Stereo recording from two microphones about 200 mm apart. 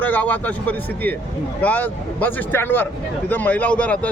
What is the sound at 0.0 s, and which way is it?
Speech, 10° left (ahead or behind).